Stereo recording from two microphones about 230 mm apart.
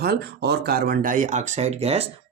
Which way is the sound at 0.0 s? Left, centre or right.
Right.